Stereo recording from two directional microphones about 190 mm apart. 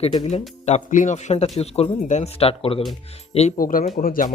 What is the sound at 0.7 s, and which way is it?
Speech, 40° left (ahead or behind).